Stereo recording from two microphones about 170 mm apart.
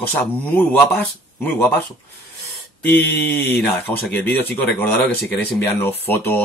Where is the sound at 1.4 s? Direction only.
10° left (ahead or behind).